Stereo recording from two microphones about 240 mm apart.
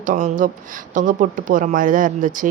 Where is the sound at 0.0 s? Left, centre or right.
Right.